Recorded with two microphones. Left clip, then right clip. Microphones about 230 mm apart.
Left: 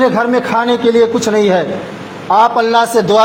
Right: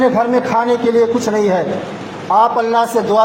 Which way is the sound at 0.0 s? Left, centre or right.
Left.